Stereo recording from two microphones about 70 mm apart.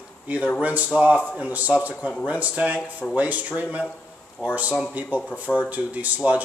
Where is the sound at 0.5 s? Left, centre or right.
Right.